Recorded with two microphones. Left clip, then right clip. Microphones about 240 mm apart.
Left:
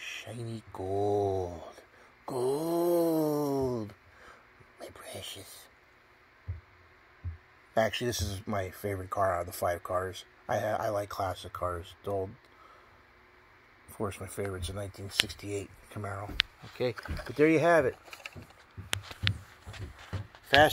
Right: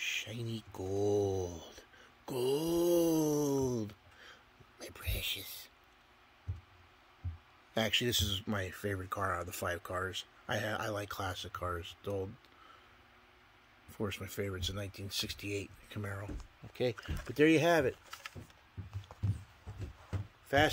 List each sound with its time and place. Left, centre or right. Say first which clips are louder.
0.2 s a sound: even; centre
7.7 s speech: left 3 dB; centre
13.9 s speech: left 3 dB; centre
20.4 s speech: left 7 dB; centre